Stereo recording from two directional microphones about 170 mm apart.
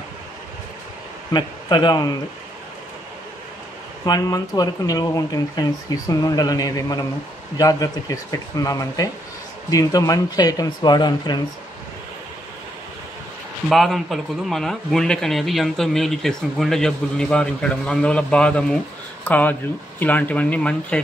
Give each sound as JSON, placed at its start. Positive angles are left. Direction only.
{"t": 1.3, "sound": "speech", "side_deg": 25}
{"t": 4.0, "sound": "speech", "side_deg": 20}
{"t": 13.7, "sound": "speech", "side_deg": 0}